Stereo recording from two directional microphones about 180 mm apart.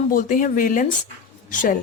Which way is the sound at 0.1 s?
50° left (ahead or behind).